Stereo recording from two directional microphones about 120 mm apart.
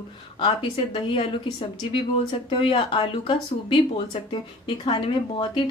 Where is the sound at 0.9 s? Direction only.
50° left (ahead or behind).